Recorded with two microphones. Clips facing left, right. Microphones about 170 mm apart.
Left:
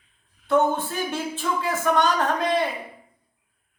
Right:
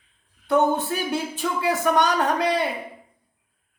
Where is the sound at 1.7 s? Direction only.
15° right (ahead or behind).